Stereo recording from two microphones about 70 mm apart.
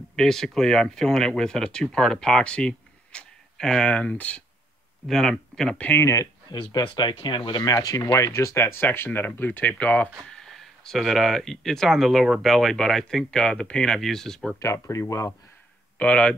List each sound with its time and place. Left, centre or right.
0.1 s speech: centre
5.0 s speech: centre
6.7 s speech: left
8.8 s speech: left
10.3 s speech: centre
14.6 s speech: left
16.0 s speech: centre